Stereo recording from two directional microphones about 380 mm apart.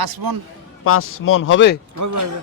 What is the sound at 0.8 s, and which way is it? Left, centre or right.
Speech, left.